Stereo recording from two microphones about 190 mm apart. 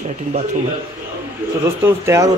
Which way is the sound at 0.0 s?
35° right (ahead or behind).